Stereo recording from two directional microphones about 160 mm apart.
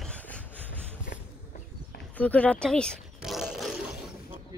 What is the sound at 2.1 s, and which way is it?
Speech, 10° left (ahead or behind).